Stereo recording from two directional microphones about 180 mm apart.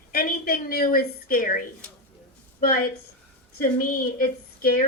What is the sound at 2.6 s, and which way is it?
A woman's voice, 50° left (ahead or behind).